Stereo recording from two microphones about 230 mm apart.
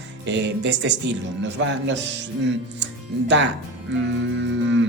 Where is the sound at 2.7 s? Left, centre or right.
Right.